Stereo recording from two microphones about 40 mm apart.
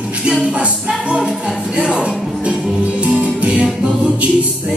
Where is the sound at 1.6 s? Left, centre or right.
Centre; by 4.5 s right.